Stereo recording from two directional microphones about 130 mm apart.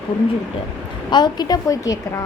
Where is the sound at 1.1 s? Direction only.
35° left (ahead or behind).